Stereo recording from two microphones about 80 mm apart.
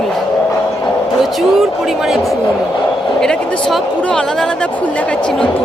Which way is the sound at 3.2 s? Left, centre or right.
Centre.